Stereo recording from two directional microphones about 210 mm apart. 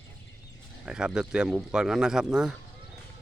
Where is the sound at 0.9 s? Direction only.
5° right (ahead or behind).